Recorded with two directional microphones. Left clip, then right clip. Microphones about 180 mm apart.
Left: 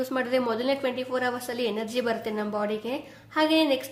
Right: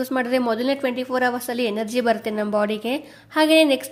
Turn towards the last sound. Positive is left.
turn(degrees=-45)  # may be behind; listen again after turning